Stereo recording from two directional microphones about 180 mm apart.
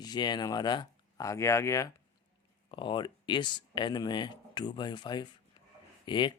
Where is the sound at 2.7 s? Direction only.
25° left (ahead or behind).